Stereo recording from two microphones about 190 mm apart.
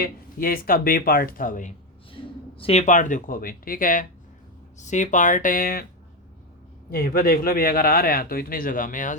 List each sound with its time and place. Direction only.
0.0 s speech: 50° left (ahead or behind)
2.6 s speech: 35° left (ahead or behind); by 5.8 s 50° left (ahead or behind)
6.9 s speech: 50° left (ahead or behind)